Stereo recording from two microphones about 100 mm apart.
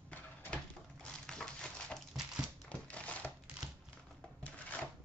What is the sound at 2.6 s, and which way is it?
Crumpling, 15° left (ahead or behind).